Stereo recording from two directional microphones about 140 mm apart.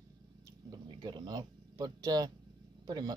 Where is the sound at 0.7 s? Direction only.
30° right (ahead or behind).